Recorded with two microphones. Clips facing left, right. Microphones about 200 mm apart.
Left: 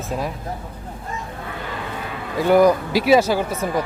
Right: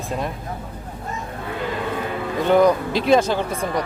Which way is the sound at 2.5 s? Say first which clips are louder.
Left 1 dB; 5° left (ahead or behind).